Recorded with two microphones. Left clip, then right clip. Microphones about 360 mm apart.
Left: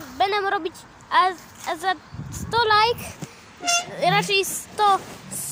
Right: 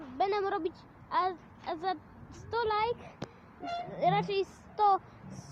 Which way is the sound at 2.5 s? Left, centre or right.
Right.